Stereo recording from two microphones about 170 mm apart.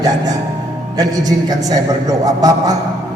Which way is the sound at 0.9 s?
20° right (ahead or behind).